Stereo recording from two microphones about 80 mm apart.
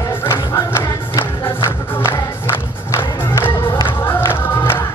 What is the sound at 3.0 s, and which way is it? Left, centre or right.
Music, left.